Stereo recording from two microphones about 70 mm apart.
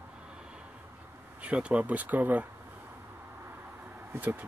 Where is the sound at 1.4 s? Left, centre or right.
Centre.